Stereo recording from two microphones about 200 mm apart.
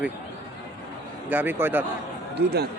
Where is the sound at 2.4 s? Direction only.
55° right (ahead or behind).